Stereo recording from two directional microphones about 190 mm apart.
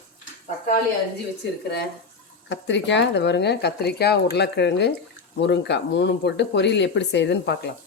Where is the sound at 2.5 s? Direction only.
70° left (ahead or behind).